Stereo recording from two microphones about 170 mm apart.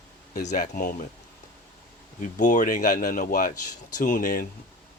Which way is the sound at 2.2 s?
50° left (ahead or behind).